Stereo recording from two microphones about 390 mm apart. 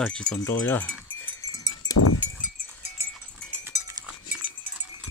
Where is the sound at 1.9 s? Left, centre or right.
Left.